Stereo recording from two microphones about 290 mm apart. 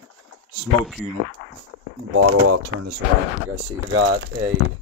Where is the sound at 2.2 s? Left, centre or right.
Right.